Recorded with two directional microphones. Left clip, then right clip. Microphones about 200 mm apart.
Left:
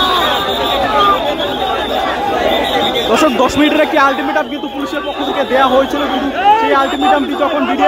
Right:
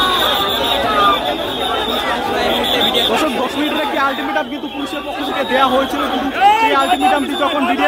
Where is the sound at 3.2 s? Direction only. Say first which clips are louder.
Left 6 dB; 15° left (ahead or behind).